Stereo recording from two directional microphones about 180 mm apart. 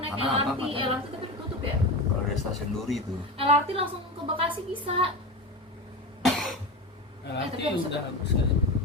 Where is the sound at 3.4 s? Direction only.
35° right (ahead or behind).